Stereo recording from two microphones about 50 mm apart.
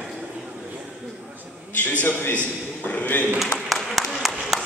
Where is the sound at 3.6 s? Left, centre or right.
Centre.